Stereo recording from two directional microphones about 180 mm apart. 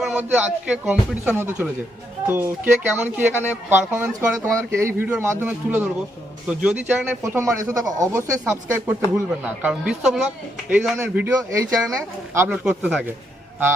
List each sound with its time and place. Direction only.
0.0 s speech: 5° right (ahead or behind)
7.2 s speech: 15° right (ahead or behind)